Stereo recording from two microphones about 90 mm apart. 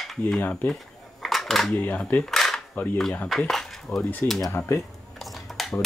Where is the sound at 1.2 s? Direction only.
Centre (ahead or behind).